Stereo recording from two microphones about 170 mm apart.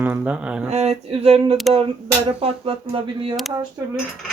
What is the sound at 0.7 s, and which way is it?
Speech, 40° right (ahead or behind).